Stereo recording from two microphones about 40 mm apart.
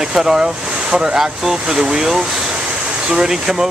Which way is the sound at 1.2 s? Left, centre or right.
Centre.